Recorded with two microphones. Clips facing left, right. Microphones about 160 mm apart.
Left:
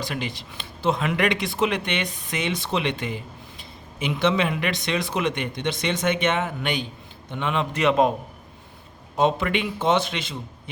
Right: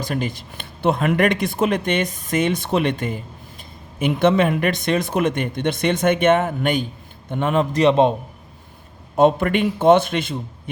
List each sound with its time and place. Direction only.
0.0 s a man's voice: 45° right (ahead or behind); by 8.1 s 30° right (ahead or behind)
9.1 s speech: 50° right (ahead or behind)